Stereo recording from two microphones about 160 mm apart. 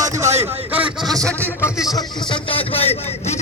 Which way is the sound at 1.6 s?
20° left (ahead or behind).